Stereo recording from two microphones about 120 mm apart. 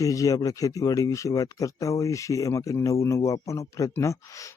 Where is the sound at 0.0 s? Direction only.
30° left (ahead or behind).